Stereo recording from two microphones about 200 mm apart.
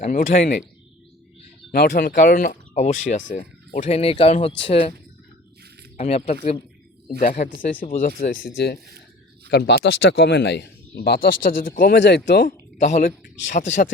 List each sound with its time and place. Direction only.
0.0 s speech: 40° left (ahead or behind)
1.7 s speech: 50° left (ahead or behind); by 4.9 s 30° left (ahead or behind)
6.0 s a man's voice: 30° left (ahead or behind); by 12.5 s 55° left (ahead or behind)
12.8 s a man's voice: 45° left (ahead or behind)